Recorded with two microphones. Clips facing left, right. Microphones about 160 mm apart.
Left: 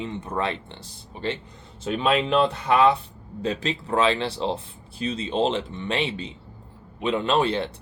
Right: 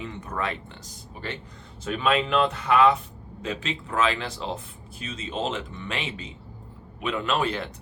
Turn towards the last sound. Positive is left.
turn(degrees=30)  # may be behind; listen again after turning